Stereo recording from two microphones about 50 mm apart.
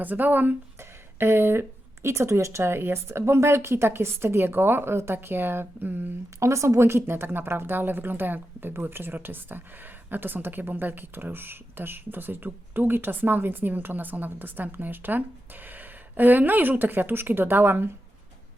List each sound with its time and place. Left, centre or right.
0.0 s speech: right
1.2 s speech: right
6.4 s a woman's voice: right